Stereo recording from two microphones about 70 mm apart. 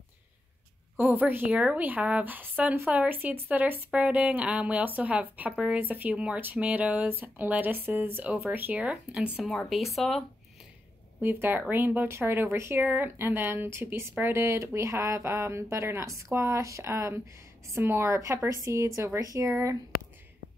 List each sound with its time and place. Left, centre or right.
1.1 s speech: right
8.8 s speech: centre
9.7 s speech: centre
11.1 s speech: right
14.2 s speech: right
18.5 s speech: right